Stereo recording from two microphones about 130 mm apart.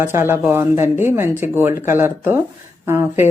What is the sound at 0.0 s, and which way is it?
A woman's voice, 15° right (ahead or behind).